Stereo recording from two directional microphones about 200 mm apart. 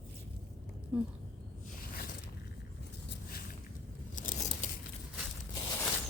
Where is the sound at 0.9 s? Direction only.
5° right (ahead or behind).